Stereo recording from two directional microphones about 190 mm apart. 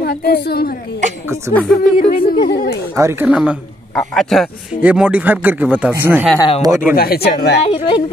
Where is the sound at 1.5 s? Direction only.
5° left (ahead or behind).